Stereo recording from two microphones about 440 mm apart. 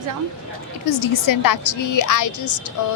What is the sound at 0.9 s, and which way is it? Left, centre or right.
A woman's voice, left.